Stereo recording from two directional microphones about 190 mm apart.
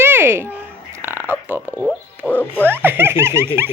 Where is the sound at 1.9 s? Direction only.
10° left (ahead or behind).